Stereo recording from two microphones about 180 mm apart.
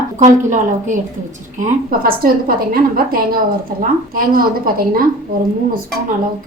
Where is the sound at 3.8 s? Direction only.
50° right (ahead or behind).